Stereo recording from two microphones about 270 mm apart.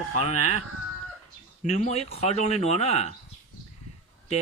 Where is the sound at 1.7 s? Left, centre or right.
Left.